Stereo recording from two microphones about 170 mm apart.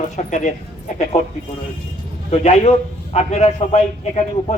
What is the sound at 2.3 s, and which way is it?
A man's voice, 40° left (ahead or behind).